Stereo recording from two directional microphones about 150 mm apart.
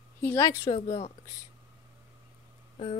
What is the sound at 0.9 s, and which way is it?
Speech, 45° left (ahead or behind).